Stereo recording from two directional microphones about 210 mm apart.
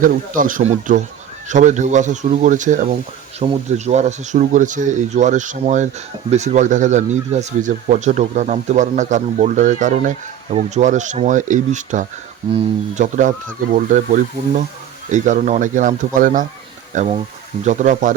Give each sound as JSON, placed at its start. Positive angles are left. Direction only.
{"t": 0.0, "sound": "speech", "side_deg": -40}